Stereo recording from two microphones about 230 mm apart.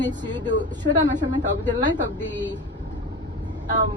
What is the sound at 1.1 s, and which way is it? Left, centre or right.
Speech, right.